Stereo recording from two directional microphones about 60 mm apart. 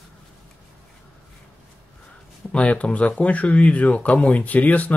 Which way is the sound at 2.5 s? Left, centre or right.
Left.